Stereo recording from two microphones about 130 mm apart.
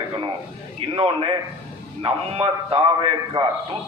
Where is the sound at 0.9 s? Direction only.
45° right (ahead or behind).